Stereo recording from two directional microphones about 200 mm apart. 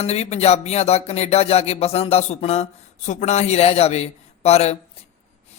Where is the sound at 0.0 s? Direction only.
30° left (ahead or behind).